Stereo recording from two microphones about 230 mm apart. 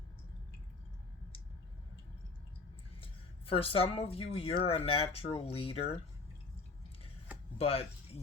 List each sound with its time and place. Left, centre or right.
3.0 s speech: left
7.6 s speech: left